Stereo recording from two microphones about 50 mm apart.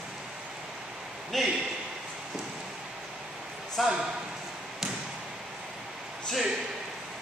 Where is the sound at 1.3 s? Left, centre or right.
Centre.